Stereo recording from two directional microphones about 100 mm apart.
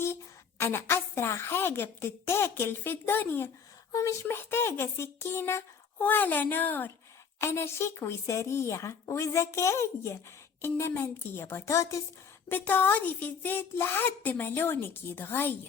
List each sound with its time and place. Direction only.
0.6 s a woman's voice: 25° left (ahead or behind)
12.5 s a woman's voice: 20° left (ahead or behind)